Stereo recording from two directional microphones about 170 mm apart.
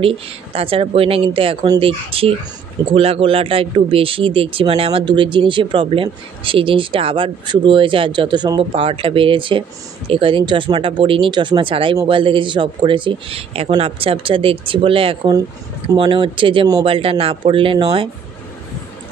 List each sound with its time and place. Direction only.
0.0 s speech: 35° right (ahead or behind)